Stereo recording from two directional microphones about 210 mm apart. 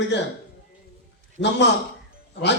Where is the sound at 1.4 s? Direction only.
55° left (ahead or behind).